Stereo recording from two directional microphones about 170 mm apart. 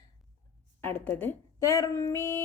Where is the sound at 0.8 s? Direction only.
10° left (ahead or behind).